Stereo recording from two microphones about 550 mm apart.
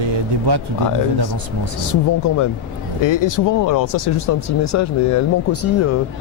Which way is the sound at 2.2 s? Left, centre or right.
Left.